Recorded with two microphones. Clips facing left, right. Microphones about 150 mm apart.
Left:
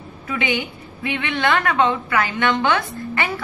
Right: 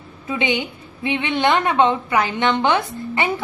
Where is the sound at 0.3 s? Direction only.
20° right (ahead or behind).